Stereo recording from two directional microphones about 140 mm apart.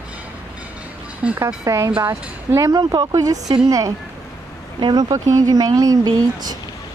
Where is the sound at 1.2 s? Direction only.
10° right (ahead or behind).